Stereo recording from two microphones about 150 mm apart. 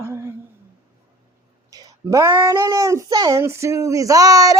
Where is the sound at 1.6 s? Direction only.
25° right (ahead or behind).